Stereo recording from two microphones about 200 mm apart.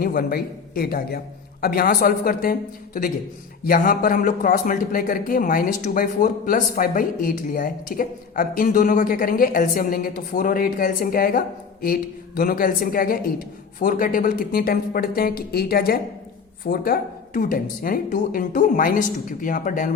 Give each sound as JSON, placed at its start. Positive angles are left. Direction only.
{"t": 0.0, "sound": "speech", "side_deg": 45}